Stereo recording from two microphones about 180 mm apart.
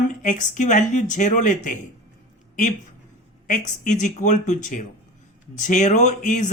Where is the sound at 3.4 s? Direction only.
45° left (ahead or behind).